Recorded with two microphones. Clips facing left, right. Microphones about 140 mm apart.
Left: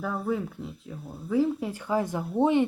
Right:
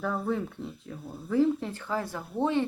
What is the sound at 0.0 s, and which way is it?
Speech, 5° left (ahead or behind).